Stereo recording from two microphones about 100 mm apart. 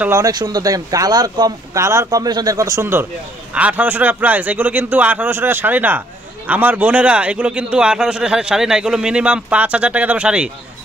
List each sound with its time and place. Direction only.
0.3 s a man's voice: 40° right (ahead or behind); by 10.5 s 10° right (ahead or behind)